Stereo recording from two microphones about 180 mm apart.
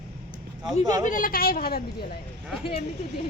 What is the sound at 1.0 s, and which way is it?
Speech, 50° left (ahead or behind).